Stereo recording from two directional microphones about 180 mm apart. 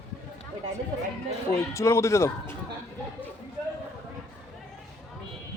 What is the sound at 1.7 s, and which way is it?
Speech, 15° left (ahead or behind).